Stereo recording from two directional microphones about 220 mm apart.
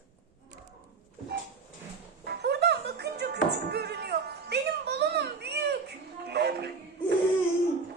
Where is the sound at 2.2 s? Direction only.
45° right (ahead or behind).